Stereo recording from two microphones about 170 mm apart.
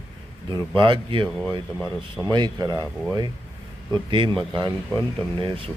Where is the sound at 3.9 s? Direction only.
25° right (ahead or behind).